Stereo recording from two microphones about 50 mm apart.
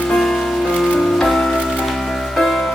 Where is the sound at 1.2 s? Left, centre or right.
Centre.